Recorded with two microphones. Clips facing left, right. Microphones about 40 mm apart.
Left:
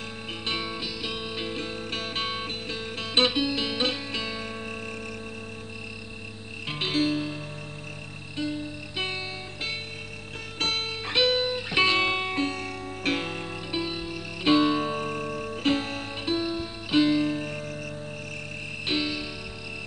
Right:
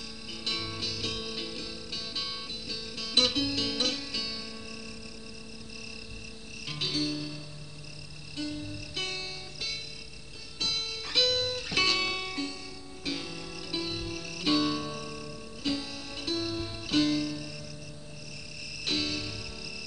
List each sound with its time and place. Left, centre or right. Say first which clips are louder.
0.5 s music: left 3 dB; left
6.7 s music: left 7 dB; left
8.4 s music: left 5 dB; left
13.7 s music: left 3 dB; left
14.5 s music: left 7 dB; left
16.3 s music: left 4 dB; left
17.3 s music: left 8 dB; left
18.9 s music: left 4 dB; left